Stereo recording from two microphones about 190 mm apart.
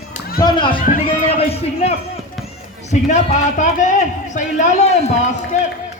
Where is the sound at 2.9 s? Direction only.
40° left (ahead or behind).